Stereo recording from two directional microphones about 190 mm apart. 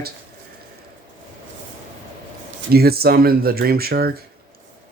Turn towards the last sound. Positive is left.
turn(degrees=-55)  # may be behind; listen again after turning